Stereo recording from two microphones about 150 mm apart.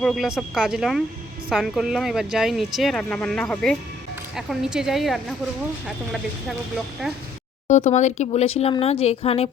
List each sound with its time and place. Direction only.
0.0 s speech: centre (ahead or behind)
7.0 s speech: centre (ahead or behind)
7.7 s speech: 50° left (ahead or behind)